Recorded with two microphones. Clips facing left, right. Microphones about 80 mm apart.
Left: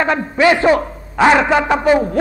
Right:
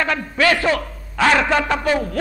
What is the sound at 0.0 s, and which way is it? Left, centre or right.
A man's voice, left.